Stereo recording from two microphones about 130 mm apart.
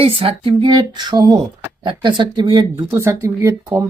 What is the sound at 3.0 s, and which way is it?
Speech, 20° right (ahead or behind).